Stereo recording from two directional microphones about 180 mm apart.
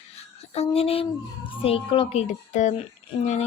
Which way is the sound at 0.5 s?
35° left (ahead or behind).